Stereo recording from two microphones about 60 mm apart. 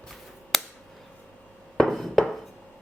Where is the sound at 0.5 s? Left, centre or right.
Centre.